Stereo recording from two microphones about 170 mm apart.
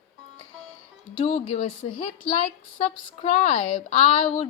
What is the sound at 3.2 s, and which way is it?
Speech, 40° left (ahead or behind).